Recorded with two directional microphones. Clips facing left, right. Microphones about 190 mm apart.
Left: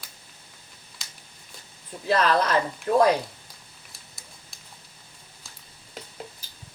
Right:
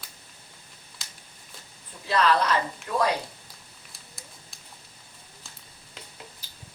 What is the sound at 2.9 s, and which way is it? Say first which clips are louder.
Speech: left 7 dB; 45° left (ahead or behind).